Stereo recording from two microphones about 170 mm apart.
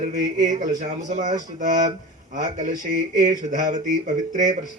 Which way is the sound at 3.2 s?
50° right (ahead or behind).